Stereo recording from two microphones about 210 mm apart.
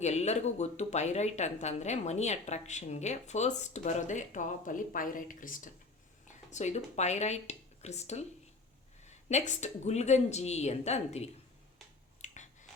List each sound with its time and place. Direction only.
0.0 s speech: 30° left (ahead or behind)
12.2 s finger snapping: 35° left (ahead or behind)